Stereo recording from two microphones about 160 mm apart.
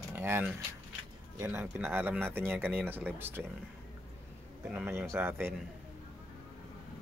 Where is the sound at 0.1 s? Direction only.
15° right (ahead or behind).